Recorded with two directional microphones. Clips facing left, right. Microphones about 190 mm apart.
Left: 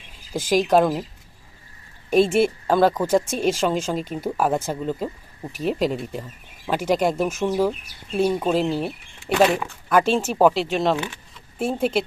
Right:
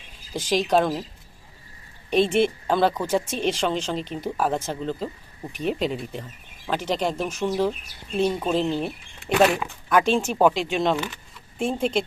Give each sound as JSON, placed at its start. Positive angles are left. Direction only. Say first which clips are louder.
{"t": 0.3, "sound": "speech", "louder": "left 3 dB", "side_deg": 10}
{"t": 2.0, "sound": "a woman's voice", "louder": "left 3 dB", "side_deg": 5}
{"t": 3.1, "sound": "speech", "louder": "left 4 dB", "side_deg": 40}
{"t": 3.6, "sound": "speech", "louder": "left 3 dB", "side_deg": 10}
{"t": 9.4, "sound": "speech", "louder": "left 1 dB", "side_deg": 0}